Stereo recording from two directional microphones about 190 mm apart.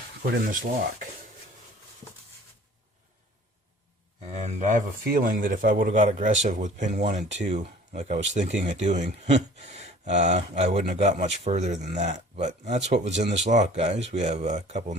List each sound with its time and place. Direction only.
0.4 s speech: 50° right (ahead or behind)
4.4 s speech: 40° right (ahead or behind)